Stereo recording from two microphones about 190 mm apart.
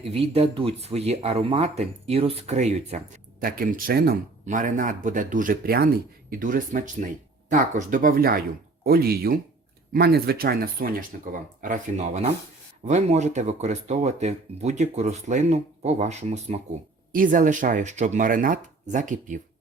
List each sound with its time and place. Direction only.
0.0 s speech: 30° right (ahead or behind)
3.4 s speech: 50° right (ahead or behind)